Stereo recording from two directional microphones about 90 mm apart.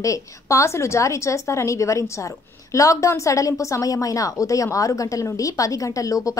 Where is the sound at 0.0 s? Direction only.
35° left (ahead or behind).